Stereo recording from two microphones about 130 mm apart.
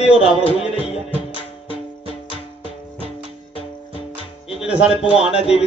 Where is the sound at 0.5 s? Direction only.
50° left (ahead or behind).